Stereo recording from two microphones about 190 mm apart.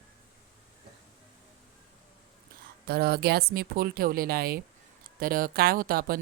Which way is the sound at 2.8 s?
55° right (ahead or behind).